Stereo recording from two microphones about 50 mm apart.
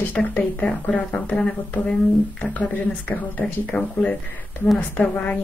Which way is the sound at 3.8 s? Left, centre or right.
Centre.